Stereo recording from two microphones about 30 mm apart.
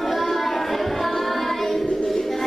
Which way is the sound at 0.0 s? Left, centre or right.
Centre.